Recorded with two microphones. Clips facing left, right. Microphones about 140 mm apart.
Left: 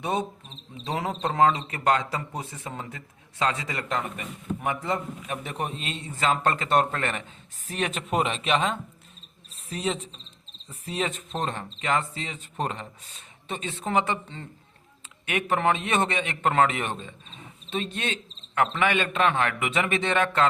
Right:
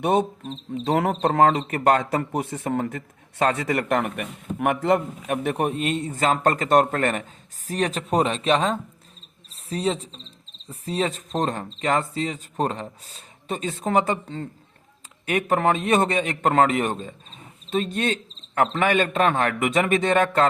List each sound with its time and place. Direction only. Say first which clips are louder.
0.0 s speech: right 7 dB; 55° right (ahead or behind); by 20.5 s 40° right (ahead or behind)